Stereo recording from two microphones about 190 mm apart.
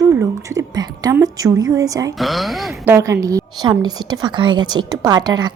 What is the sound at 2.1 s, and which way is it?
Speech, centre (ahead or behind).